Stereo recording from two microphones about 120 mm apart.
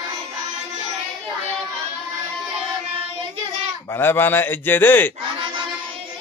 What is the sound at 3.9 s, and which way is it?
A man's voice, 20° left (ahead or behind).